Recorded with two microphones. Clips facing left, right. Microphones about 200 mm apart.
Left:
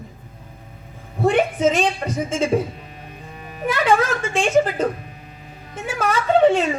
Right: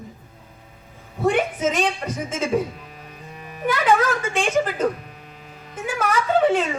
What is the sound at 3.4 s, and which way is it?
Music, 35° left (ahead or behind).